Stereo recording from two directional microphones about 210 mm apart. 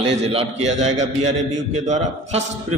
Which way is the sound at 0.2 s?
30° right (ahead or behind).